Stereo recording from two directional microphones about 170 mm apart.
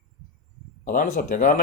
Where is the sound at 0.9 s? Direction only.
50° left (ahead or behind).